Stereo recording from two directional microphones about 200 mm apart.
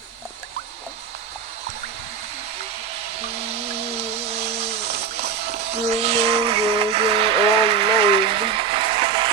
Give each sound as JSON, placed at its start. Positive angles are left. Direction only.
{"t": 3.3, "sound": "a sound", "side_deg": -30}
{"t": 5.1, "sound": "music", "side_deg": -55}
{"t": 5.5, "sound": "vehicle", "side_deg": -30}